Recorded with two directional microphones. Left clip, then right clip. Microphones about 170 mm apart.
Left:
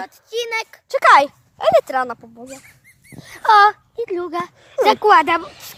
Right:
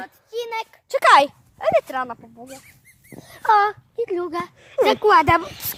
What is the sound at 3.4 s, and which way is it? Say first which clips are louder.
Speech: left 5 dB; 65° left (ahead or behind).